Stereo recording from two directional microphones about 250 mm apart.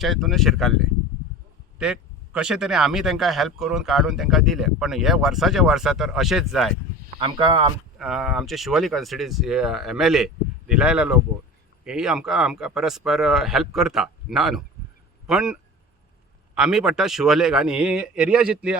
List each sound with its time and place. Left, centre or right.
0.0 s speech: centre
7.2 s speech: centre
7.9 s speech: centre
16.6 s speech: centre